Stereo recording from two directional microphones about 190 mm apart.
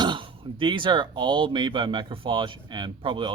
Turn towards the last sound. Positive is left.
turn(degrees=-25)  # may be behind; listen again after turning